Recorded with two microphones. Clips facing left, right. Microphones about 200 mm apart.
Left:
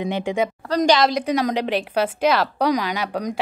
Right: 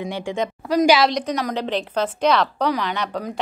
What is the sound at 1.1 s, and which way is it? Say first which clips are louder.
A woman's voice: left 3 dB; 10° left (ahead or behind).